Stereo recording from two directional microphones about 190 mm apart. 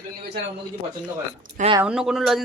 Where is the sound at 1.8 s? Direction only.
5° right (ahead or behind).